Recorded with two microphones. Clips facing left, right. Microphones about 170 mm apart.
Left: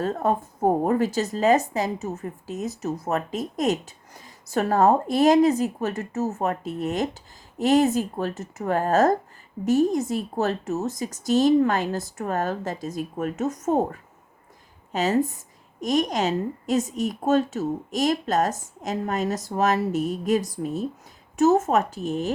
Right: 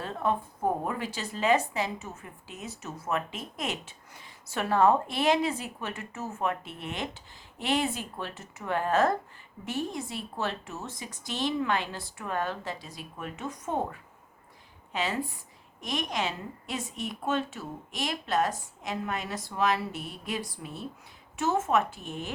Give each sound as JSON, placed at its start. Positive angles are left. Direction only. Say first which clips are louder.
{"t": 0.0, "sound": "a woman's voice", "louder": "left 6 dB", "side_deg": 40}